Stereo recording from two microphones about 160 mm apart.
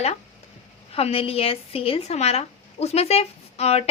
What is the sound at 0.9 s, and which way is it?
A woman's voice, 35° left (ahead or behind).